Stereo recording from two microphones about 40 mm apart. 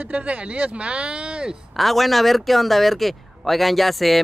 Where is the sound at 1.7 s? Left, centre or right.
Centre.